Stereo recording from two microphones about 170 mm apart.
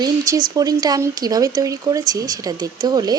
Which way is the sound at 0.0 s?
25° right (ahead or behind).